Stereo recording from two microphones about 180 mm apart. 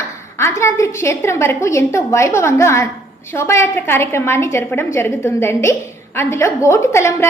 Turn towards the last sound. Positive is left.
turn(degrees=15)  # may be behind; listen again after turning